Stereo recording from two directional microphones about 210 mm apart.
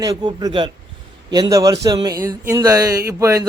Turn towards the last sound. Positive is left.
turn(degrees=-15)  # may be behind; listen again after turning